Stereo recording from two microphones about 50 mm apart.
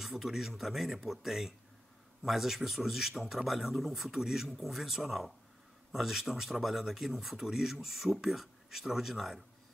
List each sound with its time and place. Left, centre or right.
0.0 s speech: centre